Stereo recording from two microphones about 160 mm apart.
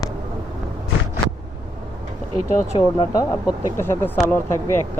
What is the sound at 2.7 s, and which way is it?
Speech, 25° left (ahead or behind).